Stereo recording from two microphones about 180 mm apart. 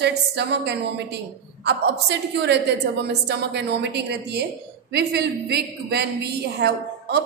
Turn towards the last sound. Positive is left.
turn(degrees=-65)  # may be behind; listen again after turning